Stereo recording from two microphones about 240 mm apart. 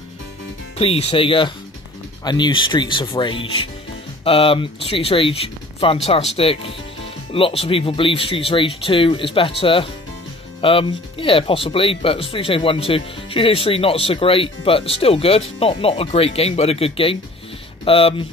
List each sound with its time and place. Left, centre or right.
0.7 s speech: left